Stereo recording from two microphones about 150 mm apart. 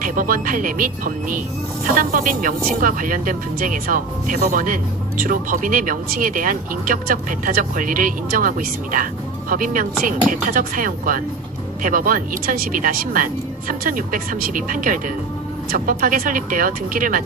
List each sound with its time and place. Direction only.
0.0 s speech: 65° right (ahead or behind)